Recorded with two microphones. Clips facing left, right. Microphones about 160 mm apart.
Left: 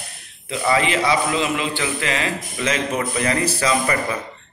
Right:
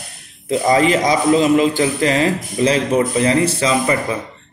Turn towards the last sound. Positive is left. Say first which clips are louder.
# right 3 dB
turn(degrees=-25)  # may be behind; listen again after turning